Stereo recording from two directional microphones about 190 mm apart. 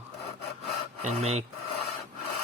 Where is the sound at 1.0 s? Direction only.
35° right (ahead or behind).